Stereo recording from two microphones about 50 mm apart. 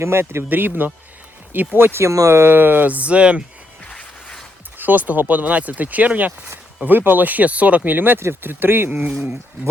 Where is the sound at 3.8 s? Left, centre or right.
Left.